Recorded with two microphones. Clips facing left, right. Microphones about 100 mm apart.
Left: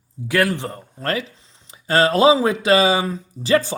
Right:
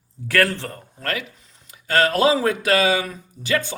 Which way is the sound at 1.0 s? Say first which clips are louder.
Left 4 dB; 30° left (ahead or behind).